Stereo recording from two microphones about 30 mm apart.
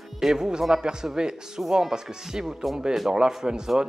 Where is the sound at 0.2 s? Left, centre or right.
Centre.